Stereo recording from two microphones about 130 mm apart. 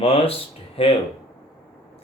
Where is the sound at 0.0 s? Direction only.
50° left (ahead or behind).